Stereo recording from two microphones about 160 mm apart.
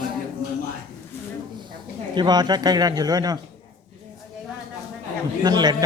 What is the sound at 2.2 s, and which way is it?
A man's voice, 25° right (ahead or behind).